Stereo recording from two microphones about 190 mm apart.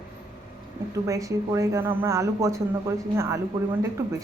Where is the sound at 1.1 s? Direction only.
15° right (ahead or behind).